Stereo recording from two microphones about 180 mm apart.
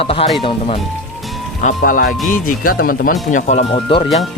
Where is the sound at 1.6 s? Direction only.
50° left (ahead or behind).